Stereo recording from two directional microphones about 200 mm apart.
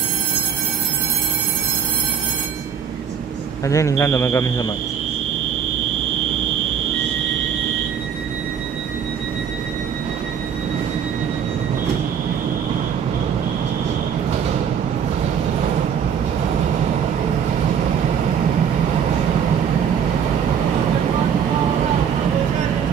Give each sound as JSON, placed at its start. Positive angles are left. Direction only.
{"t": 3.6, "sound": "speech", "side_deg": 15}